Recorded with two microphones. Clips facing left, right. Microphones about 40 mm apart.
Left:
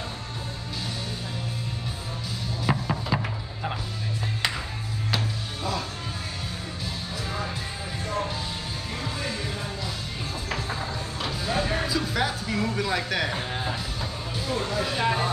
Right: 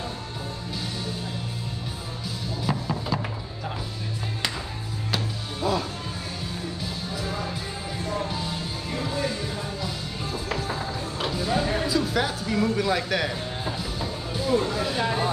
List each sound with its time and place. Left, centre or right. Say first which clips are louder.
2.6 s music: left 1 dB; left
5.1 s music: even; centre
10.5 s music: right 1 dB; centre
14.3 s speech: right 5 dB; centre